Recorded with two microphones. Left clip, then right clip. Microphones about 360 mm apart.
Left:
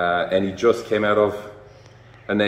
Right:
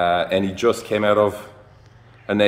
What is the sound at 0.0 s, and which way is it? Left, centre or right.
A man's voice, right.